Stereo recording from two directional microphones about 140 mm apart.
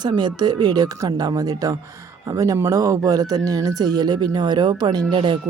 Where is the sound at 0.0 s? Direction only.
30° right (ahead or behind).